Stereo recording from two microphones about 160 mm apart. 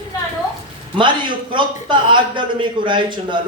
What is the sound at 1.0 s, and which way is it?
A man's voice, 30° right (ahead or behind).